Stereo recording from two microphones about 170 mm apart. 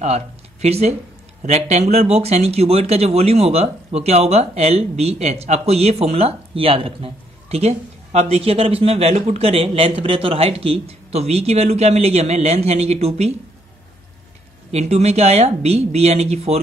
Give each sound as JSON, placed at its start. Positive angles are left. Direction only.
{"t": 0.0, "sound": "speech", "side_deg": -40}
{"t": 14.7, "sound": "speech", "side_deg": -40}